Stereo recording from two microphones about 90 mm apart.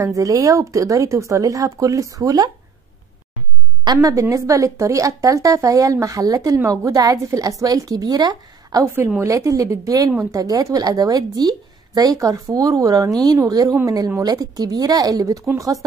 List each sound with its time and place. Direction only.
0.0 s a woman's voice: 40° right (ahead or behind)
3.8 s a woman's voice: 45° right (ahead or behind)
8.8 s a woman's voice: 30° right (ahead or behind)